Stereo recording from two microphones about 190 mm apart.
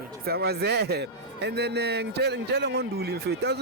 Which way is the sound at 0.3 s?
55° right (ahead or behind).